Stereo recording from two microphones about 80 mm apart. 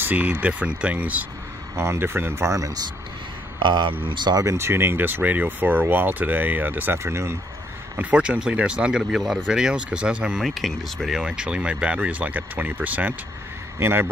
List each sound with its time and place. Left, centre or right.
0.0 s speech: right
1.8 s speech: right
3.5 s speech: right
4.0 s speech: right
4.4 s speech: right
8.0 s speech: centre
10.4 s speech: centre; by 14.0 s right